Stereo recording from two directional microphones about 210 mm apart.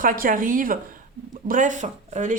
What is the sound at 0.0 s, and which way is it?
A woman's voice, 40° right (ahead or behind).